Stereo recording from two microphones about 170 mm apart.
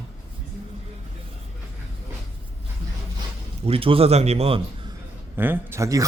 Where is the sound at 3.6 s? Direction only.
35° right (ahead or behind).